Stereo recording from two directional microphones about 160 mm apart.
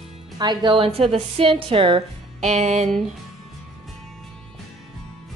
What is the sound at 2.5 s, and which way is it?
Music, 45° right (ahead or behind).